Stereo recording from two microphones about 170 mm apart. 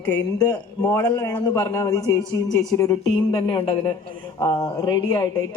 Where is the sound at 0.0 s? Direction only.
10° left (ahead or behind).